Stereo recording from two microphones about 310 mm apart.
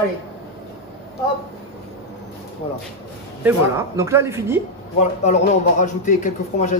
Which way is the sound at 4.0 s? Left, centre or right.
Centre.